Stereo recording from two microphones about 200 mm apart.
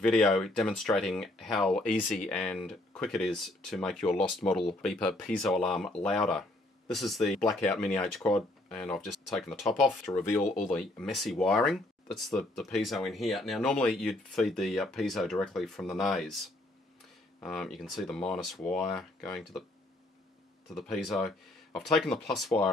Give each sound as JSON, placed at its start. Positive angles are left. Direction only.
{"t": 0.0, "sound": "speech", "side_deg": 5}
{"t": 10.1, "sound": "speech", "side_deg": 15}
{"t": 10.4, "sound": "speech", "side_deg": 40}
{"t": 10.7, "sound": "speech", "side_deg": 5}
{"t": 20.7, "sound": "speech", "side_deg": 0}